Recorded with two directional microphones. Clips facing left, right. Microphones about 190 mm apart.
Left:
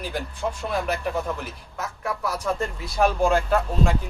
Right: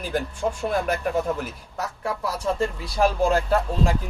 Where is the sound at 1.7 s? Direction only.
30° right (ahead or behind).